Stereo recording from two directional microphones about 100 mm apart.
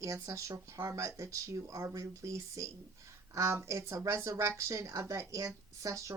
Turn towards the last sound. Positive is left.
turn(degrees=-30)  # may be behind; listen again after turning